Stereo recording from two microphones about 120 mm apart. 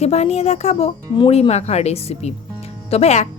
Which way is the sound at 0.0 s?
65° left (ahead or behind).